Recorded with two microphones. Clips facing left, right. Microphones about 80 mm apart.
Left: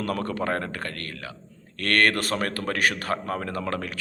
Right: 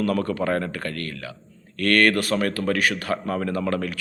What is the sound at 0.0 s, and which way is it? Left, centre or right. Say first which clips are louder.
A man's voice: right 4 dB; left.